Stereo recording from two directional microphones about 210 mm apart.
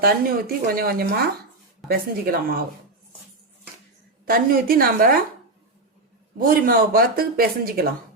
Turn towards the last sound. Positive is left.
turn(degrees=-45)  # may be behind; listen again after turning